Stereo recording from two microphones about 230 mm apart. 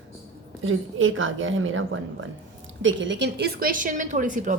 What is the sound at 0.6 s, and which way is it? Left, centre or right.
A woman's voice, right.